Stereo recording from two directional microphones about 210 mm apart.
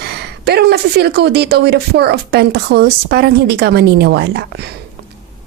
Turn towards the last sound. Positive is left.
turn(degrees=-50)  # may be behind; listen again after turning